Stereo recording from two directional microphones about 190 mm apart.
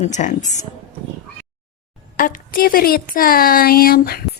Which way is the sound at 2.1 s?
45° left (ahead or behind).